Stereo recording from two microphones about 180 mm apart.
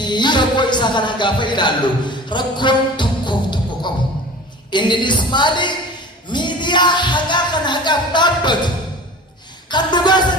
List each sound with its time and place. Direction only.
0.0 s speech: 25° left (ahead or behind)
6.2 s music: 25° left (ahead or behind)
9.6 s speech: 25° left (ahead or behind)